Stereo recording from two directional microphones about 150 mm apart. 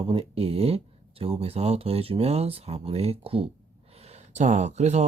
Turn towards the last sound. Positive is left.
turn(degrees=-45)  # may be behind; listen again after turning